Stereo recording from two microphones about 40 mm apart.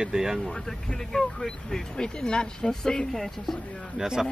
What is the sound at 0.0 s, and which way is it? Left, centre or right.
Speech, centre.